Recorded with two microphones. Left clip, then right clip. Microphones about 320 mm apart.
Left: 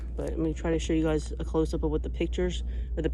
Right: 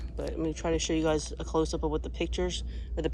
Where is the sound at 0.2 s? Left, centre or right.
Centre.